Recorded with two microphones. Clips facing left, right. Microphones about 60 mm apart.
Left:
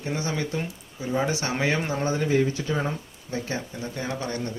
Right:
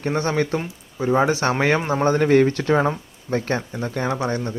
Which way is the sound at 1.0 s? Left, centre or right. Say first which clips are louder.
Right 8 dB; right.